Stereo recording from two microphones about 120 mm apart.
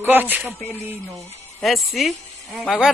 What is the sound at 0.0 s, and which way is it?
Speech, 15° right (ahead or behind).